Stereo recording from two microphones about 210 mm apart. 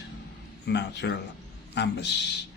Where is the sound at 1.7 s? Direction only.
55° left (ahead or behind).